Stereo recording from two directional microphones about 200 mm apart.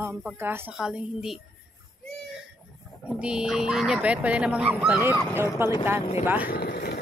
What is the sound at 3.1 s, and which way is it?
A woman's voice, 5° right (ahead or behind).